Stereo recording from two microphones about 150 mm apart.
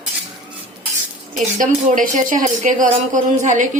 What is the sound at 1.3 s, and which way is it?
Speech, 60° right (ahead or behind).